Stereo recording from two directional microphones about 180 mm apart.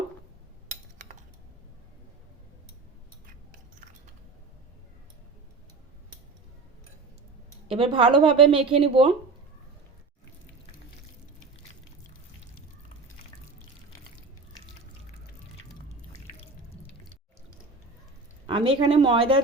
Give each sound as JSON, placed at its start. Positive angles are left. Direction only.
{"t": 7.7, "sound": "speech", "side_deg": -30}
{"t": 18.4, "sound": "speech", "side_deg": -30}